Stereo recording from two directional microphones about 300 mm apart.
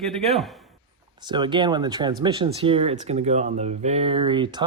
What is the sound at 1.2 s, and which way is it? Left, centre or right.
Speech, centre.